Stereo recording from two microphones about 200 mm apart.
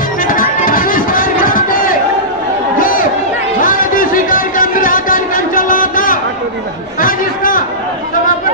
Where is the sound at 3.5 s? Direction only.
40° left (ahead or behind).